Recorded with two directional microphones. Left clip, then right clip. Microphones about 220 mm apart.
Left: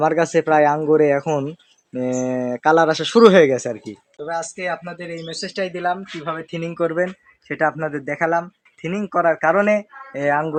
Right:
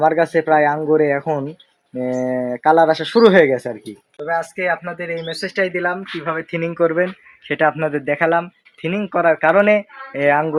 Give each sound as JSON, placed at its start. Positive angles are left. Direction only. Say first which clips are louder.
{"t": 0.0, "sound": "speech", "louder": "right 2 dB", "side_deg": 50}
{"t": 4.9, "sound": "speech", "louder": "right 6 dB", "side_deg": -15}
{"t": 7.4, "sound": "speech", "louder": "right 4 dB", "side_deg": -30}